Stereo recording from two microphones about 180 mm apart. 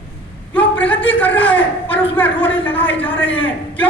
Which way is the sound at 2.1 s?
10° left (ahead or behind).